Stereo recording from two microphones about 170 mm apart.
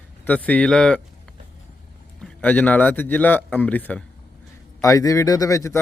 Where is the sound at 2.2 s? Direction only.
10° left (ahead or behind).